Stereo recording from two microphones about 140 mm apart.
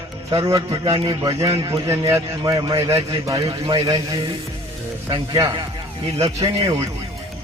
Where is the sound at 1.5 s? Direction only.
40° right (ahead or behind).